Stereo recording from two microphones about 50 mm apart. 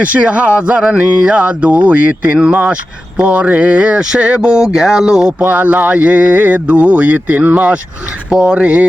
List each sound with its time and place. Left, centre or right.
0.0 s speech: right; by 5.3 s centre
5.4 s a sound: right
6.7 s speech: right
8.3 s speech: centre
8.5 s speech: right